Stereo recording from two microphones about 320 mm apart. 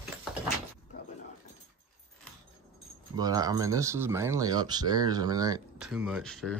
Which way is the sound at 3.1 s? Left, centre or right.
Centre.